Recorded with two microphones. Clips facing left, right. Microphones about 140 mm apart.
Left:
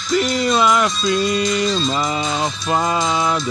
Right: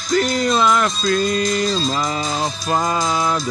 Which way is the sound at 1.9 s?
Centre (ahead or behind).